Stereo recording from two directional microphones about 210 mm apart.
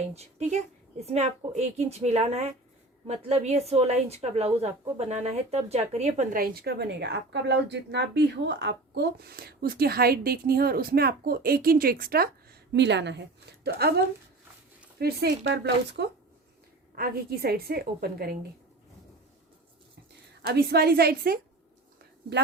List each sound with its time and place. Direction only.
0.1 s a woman's voice: 30° right (ahead or behind); by 18.3 s 50° right (ahead or behind)
20.4 s a woman's voice: 50° right (ahead or behind)